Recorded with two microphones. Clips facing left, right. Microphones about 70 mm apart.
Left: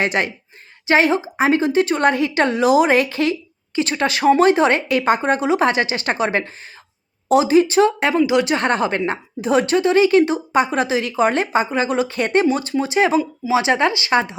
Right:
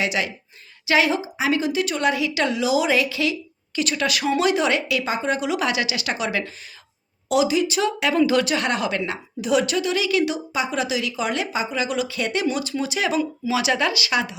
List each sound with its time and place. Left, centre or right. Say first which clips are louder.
0.0 s a woman's voice: left 4 dB; left
8.3 s speech: left 3 dB; left
8.5 s a woman's voice: left 4 dB; left